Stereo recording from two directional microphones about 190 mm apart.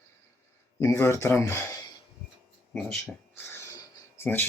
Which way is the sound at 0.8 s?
15° left (ahead or behind).